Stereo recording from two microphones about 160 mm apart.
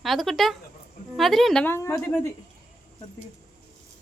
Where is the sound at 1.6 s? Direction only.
15° left (ahead or behind).